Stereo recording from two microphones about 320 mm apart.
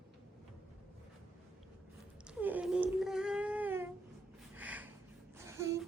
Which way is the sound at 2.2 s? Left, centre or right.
Centre.